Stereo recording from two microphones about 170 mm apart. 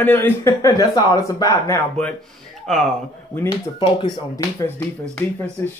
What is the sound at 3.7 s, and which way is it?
Speech, 25° left (ahead or behind).